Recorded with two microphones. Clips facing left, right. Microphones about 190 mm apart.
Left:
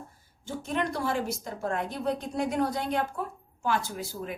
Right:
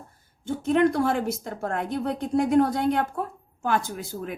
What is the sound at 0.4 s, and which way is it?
Speech, 55° right (ahead or behind).